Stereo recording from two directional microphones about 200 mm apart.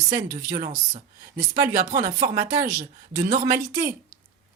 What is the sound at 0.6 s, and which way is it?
Speech, 45° right (ahead or behind).